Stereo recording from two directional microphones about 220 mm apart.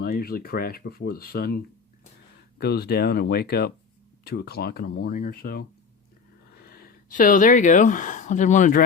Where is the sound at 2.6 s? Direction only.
45° left (ahead or behind).